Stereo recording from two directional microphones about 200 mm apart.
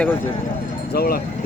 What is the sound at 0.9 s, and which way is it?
Speech, 50° left (ahead or behind).